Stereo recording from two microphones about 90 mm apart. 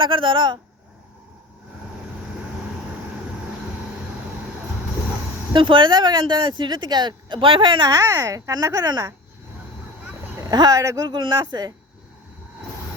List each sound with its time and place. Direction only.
0.0 s speech: 70° right (ahead or behind)
5.5 s speech: 65° right (ahead or behind)
7.9 s speech: 45° right (ahead or behind)
10.5 s speech: 45° right (ahead or behind)